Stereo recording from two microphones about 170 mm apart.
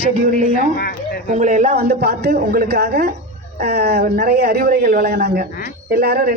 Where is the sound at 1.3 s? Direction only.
45° right (ahead or behind).